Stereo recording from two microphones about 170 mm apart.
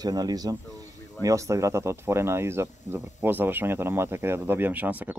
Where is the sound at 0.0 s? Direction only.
20° right (ahead or behind).